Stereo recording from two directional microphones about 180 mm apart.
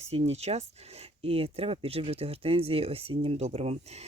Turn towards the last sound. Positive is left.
turn(degrees=-35)  # may be behind; listen again after turning